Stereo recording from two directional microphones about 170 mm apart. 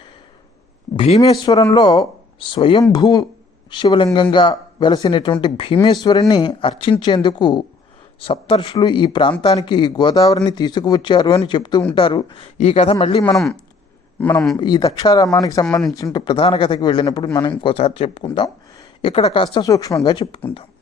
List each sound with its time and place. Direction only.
0.9 s speech: 35° left (ahead or behind)
1.5 s speech: 20° left (ahead or behind)
14.5 s speech: 25° left (ahead or behind)
19.7 s speech: 20° left (ahead or behind)